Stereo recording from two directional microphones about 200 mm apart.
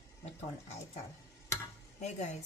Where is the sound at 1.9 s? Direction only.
35° left (ahead or behind).